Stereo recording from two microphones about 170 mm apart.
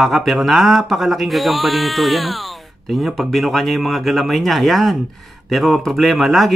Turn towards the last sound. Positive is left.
turn(degrees=0)  # may be behind; listen again after turning